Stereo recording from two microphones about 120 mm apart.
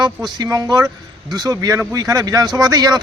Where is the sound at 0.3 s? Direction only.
30° right (ahead or behind).